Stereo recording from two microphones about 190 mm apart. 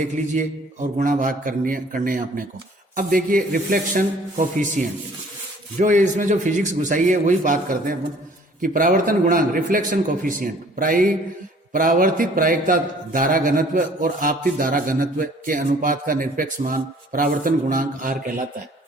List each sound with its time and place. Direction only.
0.3 s a man's voice: 40° right (ahead or behind)